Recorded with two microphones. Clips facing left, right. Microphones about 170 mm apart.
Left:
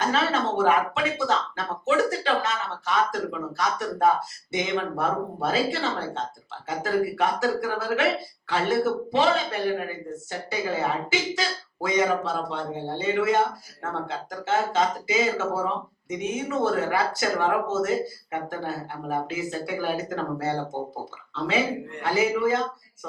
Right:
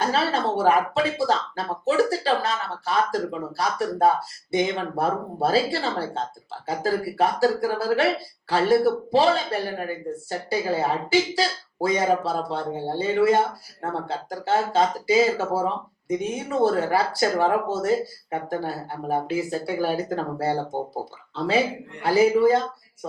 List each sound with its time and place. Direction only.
0.0 s speech: 35° right (ahead or behind)